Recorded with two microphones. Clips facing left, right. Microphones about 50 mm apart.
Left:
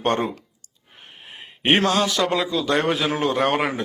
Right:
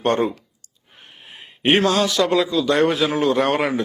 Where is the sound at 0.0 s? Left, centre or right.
Centre.